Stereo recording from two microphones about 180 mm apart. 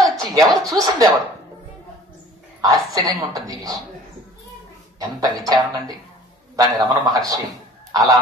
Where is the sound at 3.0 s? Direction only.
20° right (ahead or behind).